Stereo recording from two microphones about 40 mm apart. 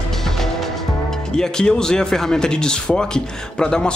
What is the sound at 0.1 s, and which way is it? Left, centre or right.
Music, centre.